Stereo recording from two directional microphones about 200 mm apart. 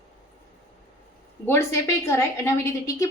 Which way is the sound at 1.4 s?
15° left (ahead or behind).